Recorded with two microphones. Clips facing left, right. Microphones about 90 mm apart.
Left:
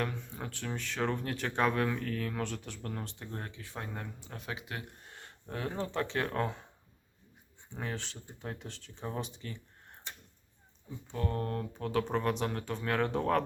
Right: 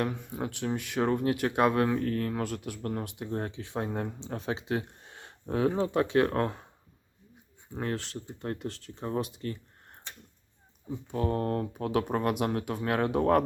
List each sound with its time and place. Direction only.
0.0 s speech: 15° right (ahead or behind)
7.7 s speech: centre (ahead or behind)
11.1 s speech: 10° right (ahead or behind)